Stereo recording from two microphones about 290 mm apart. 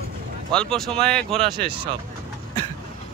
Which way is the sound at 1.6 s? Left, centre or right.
Centre.